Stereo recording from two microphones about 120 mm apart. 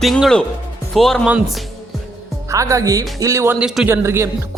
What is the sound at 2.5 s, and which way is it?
Speech, 25° right (ahead or behind).